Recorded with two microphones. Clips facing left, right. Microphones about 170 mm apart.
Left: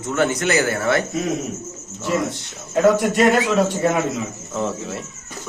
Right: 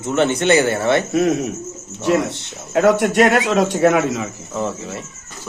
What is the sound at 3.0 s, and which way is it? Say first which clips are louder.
A man's voice: right 2 dB; 75° right (ahead or behind).